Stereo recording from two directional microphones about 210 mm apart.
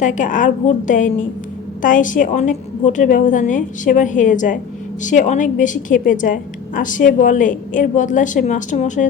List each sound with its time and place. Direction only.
0.0 s a woman's voice: 35° left (ahead or behind)